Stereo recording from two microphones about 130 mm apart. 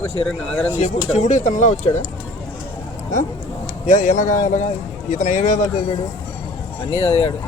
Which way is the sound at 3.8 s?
70° left (ahead or behind).